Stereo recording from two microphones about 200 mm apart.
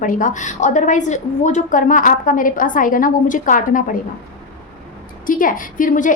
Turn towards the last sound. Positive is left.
turn(degrees=40)  # may be behind; listen again after turning